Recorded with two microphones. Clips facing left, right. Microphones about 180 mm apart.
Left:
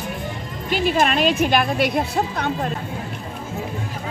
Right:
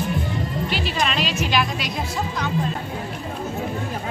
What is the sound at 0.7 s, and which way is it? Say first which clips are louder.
A woman's voice: left 10 dB; 50° left (ahead or behind).